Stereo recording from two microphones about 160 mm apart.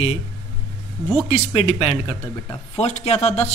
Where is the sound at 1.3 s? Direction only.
40° left (ahead or behind).